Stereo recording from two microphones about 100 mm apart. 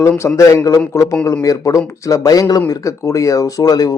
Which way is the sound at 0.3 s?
30° left (ahead or behind).